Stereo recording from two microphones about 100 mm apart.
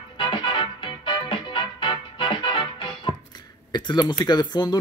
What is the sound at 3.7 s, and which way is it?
Speech, 45° left (ahead or behind).